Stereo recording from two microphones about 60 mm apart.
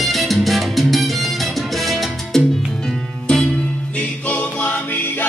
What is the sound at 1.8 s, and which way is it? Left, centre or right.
Salsa music, centre.